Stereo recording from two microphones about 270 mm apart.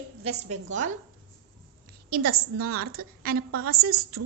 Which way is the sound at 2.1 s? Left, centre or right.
Right.